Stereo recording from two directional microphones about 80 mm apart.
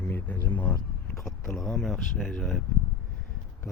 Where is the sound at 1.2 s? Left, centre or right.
Centre.